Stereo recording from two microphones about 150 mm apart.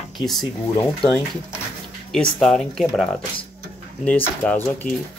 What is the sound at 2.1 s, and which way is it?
Speech, 5° left (ahead or behind).